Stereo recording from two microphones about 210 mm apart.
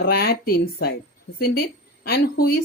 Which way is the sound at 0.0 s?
45° left (ahead or behind).